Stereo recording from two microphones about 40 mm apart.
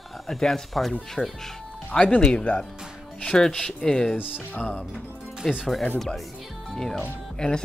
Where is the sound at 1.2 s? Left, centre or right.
Left.